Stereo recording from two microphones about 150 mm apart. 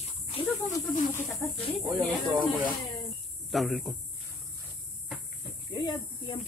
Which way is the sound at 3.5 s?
Centre (ahead or behind).